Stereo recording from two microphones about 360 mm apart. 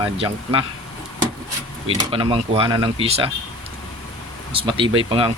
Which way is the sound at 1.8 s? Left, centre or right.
Centre.